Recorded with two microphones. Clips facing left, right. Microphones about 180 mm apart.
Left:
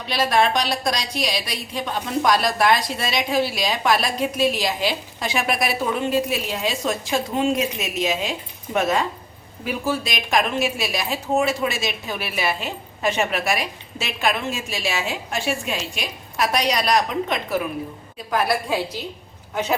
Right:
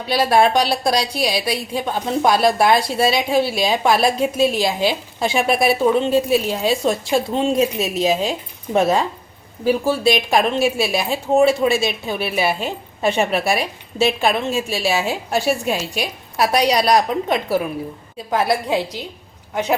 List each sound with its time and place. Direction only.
0.1 s a woman's voice: 35° right (ahead or behind)
18.3 s a woman's voice: 25° right (ahead or behind)